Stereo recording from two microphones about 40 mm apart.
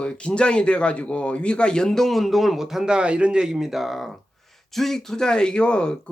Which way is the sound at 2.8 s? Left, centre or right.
Right.